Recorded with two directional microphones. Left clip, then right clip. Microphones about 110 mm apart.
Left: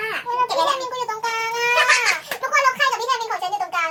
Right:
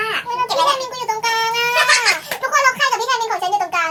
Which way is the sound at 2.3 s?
5° right (ahead or behind).